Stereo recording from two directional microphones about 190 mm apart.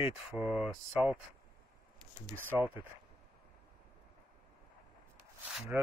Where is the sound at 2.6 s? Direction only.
10° right (ahead or behind).